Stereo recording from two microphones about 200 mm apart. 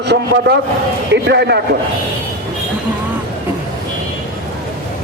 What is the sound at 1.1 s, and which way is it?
Speech, 60° right (ahead or behind).